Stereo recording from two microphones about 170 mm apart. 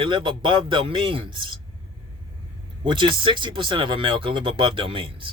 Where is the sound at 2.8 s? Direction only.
30° right (ahead or behind).